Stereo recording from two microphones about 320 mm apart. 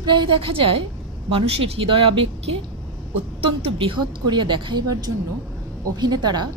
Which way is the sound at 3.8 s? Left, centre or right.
Centre.